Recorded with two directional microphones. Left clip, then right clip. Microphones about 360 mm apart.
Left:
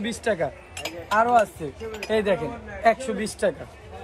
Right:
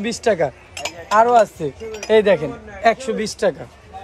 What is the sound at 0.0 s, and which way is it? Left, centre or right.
Speech, centre.